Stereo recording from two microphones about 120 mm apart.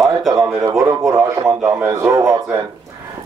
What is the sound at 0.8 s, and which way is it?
Speech, 30° right (ahead or behind).